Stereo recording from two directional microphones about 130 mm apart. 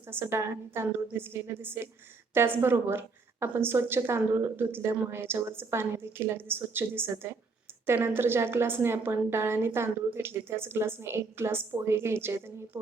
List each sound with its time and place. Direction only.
0.0 s a woman's voice: 20° right (ahead or behind)